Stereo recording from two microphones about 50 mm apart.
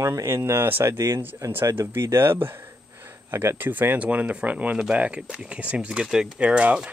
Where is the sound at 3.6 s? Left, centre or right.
Right.